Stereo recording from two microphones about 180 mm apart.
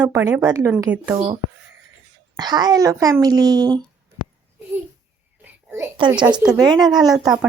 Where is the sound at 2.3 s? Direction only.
25° right (ahead or behind).